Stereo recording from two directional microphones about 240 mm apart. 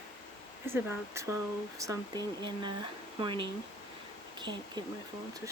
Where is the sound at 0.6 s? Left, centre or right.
Centre.